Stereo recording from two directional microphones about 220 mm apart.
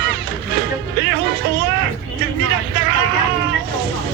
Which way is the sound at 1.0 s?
50° right (ahead or behind).